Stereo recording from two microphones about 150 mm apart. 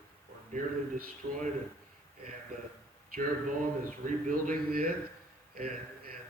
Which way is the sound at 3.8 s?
65° right (ahead or behind).